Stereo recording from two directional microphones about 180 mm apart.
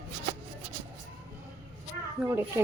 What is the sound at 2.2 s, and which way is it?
Speech, 5° right (ahead or behind).